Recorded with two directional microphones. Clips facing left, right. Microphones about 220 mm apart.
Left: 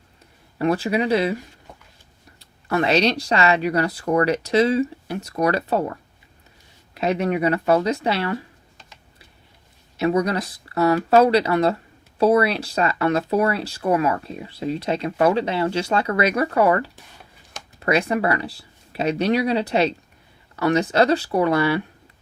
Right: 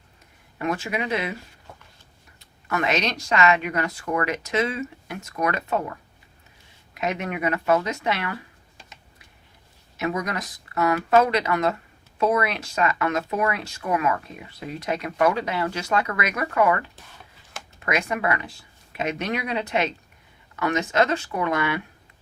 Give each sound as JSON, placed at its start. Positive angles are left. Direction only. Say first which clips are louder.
{"t": 0.6, "sound": "speech", "louder": "left 7 dB", "side_deg": 35}
{"t": 2.4, "sound": "speech", "louder": "left 5 dB", "side_deg": 30}
{"t": 10.0, "sound": "speech", "louder": "left 7 dB", "side_deg": 35}